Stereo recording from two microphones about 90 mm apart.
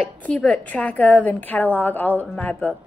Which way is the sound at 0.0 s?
10° left (ahead or behind).